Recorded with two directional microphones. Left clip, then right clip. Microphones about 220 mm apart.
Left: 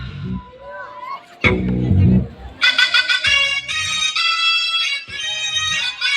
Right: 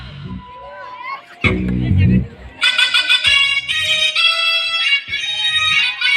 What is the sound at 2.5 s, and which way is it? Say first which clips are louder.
Music: even; 45° right (ahead or behind).